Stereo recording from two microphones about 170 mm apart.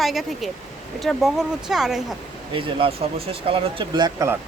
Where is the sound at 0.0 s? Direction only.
Centre (ahead or behind).